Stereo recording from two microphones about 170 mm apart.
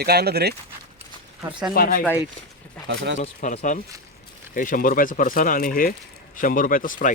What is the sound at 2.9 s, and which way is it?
Speech, 90° right.